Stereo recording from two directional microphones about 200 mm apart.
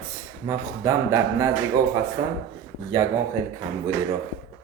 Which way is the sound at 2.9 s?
15° right (ahead or behind).